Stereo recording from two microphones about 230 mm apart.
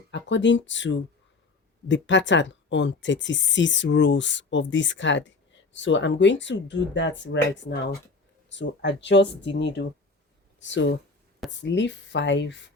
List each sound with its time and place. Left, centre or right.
0.1 s speech: left